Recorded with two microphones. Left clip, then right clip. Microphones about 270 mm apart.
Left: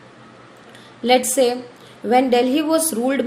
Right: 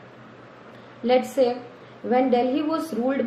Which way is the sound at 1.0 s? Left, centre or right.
Left.